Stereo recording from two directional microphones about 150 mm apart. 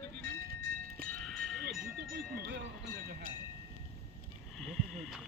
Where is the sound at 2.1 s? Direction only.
90° right.